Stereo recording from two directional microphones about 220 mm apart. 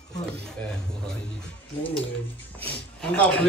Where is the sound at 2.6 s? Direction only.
10° left (ahead or behind).